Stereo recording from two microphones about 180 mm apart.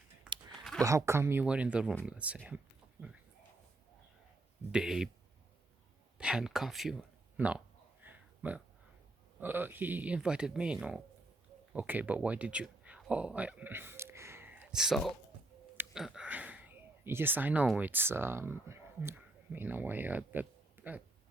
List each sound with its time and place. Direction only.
0.8 s speech: 15° right (ahead or behind)
4.7 s speech: 5° right (ahead or behind)
6.1 s speech: 5° right (ahead or behind)
8.0 s a sound: 10° right (ahead or behind)
9.4 s speech: 10° right (ahead or behind)